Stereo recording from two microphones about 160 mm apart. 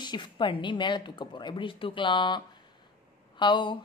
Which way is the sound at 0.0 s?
30° left (ahead or behind).